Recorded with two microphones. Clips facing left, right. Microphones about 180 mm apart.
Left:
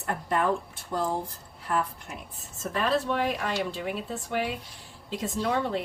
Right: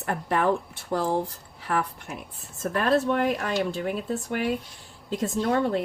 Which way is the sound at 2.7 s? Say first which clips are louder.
Right 4 dB; 50° right (ahead or behind).